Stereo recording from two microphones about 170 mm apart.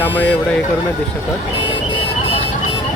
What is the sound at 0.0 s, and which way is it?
Speech, 10° left (ahead or behind).